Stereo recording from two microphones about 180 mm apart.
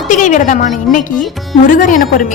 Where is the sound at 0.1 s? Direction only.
45° left (ahead or behind).